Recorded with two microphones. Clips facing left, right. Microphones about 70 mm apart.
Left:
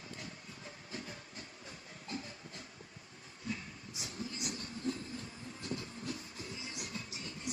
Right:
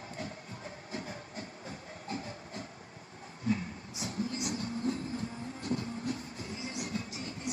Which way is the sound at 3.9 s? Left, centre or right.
Right.